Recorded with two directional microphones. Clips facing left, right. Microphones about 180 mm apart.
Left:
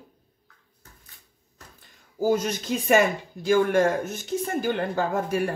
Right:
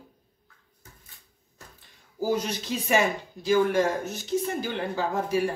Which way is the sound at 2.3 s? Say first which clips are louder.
Left 2 dB; 50° left (ahead or behind).